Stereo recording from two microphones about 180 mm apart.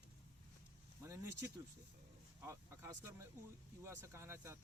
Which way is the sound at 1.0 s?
15° right (ahead or behind).